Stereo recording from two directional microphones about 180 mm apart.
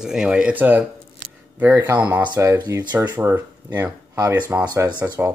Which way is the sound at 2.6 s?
25° right (ahead or behind).